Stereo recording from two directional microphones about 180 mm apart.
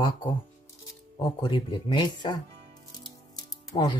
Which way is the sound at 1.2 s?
30° left (ahead or behind).